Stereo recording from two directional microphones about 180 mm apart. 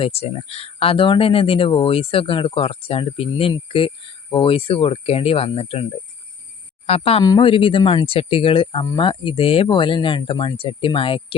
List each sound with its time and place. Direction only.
0.0 s speech: 35° left (ahead or behind)
6.8 s speech: 35° left (ahead or behind)